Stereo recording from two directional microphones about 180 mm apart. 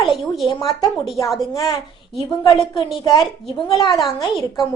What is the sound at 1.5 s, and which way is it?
Speech, 20° left (ahead or behind).